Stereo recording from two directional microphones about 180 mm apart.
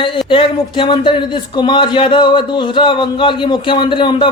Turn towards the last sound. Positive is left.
turn(degrees=25)  # may be behind; listen again after turning